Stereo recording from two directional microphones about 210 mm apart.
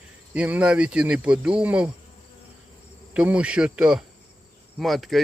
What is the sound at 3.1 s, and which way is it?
Cricket, 5° right (ahead or behind).